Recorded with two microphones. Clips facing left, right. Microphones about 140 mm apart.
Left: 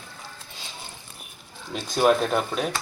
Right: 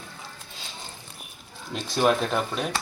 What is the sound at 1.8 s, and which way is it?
Speech, centre (ahead or behind).